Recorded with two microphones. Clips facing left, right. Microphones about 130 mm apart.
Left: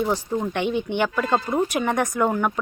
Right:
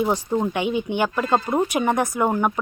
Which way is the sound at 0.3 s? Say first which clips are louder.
Right 3 dB; 20° right (ahead or behind).